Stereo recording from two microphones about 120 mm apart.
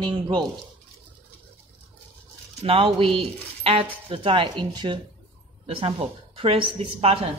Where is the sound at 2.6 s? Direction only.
45° right (ahead or behind).